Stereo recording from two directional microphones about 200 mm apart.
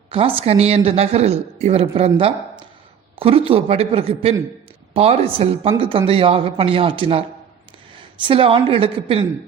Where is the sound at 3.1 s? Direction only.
30° right (ahead or behind).